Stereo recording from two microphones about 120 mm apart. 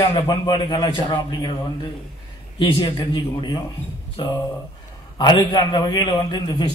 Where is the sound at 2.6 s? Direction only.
40° left (ahead or behind).